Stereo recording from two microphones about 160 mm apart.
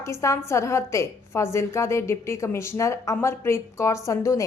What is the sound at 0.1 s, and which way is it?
A woman's voice, 20° left (ahead or behind).